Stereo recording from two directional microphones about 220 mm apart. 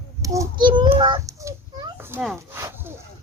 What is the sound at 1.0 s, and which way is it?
Wood, 20° right (ahead or behind).